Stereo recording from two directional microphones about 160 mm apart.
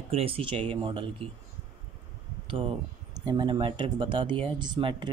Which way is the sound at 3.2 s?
30° right (ahead or behind).